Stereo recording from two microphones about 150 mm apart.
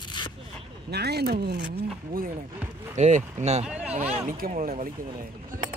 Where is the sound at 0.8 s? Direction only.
90° right.